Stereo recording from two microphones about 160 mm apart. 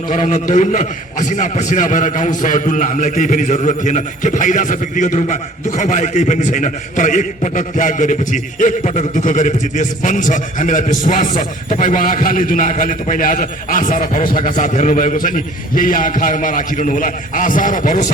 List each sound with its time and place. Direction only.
0.1 s a man's voice: 50° left (ahead or behind)